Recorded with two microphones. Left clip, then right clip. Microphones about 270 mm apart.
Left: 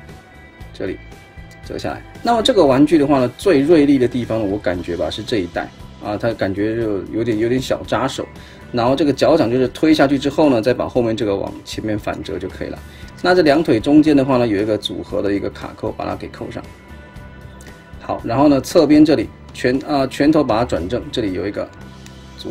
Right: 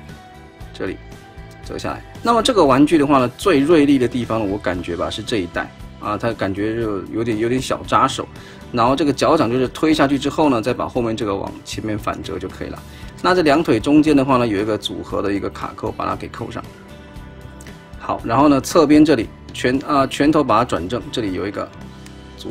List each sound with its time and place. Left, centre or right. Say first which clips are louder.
1.7 s speech: left 1 dB; centre
18.0 s speech: even; centre